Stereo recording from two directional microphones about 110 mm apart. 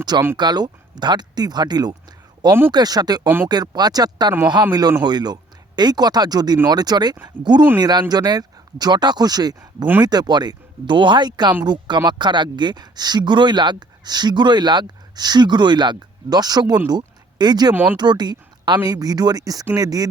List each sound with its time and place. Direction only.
0.3 s speech: 40° right (ahead or behind)
2.5 s speech: 20° right (ahead or behind)
2.7 s speech: 35° right (ahead or behind)